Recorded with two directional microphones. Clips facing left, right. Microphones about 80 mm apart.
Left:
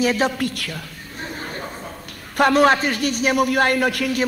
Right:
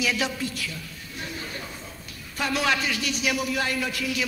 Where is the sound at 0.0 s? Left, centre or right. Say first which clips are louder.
Left 8 dB; left.